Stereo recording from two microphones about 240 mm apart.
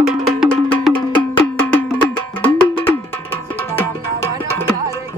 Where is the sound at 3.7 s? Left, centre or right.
Centre.